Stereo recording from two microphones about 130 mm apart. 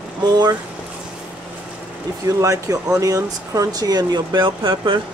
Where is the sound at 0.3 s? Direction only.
35° right (ahead or behind).